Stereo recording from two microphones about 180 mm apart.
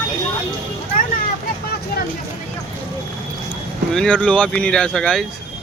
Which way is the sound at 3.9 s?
5° left (ahead or behind).